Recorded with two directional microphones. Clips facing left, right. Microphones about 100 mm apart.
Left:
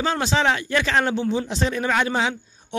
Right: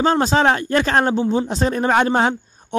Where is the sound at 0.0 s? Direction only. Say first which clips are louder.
Right 5 dB; 40° right (ahead or behind).